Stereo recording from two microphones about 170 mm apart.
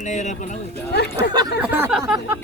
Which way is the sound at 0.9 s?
75° left (ahead or behind).